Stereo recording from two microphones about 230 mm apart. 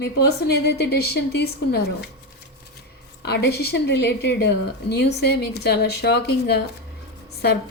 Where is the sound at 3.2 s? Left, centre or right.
Left.